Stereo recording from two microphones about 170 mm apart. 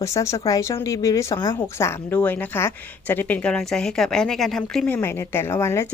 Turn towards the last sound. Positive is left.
turn(degrees=15)  # may be behind; listen again after turning